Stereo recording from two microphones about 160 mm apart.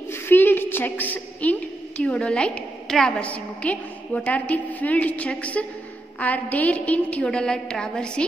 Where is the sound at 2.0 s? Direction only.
5° left (ahead or behind).